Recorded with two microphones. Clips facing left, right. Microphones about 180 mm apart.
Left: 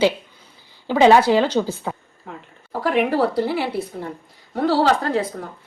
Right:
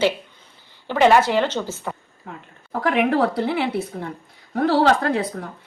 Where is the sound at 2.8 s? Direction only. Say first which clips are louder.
Even; 55° right (ahead or behind).